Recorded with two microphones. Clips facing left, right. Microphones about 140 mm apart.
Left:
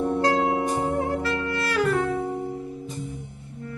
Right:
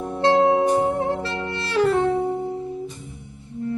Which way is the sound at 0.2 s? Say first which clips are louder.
Right 10 dB; 25° right (ahead or behind).